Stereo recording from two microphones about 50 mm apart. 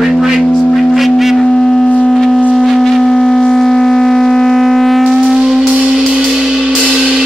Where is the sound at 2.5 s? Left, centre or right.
Centre.